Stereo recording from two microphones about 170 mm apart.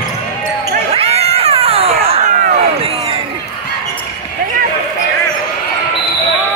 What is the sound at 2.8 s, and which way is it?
Crowd, 35° right (ahead or behind).